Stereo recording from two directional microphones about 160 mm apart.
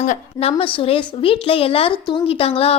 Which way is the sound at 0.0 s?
45° left (ahead or behind).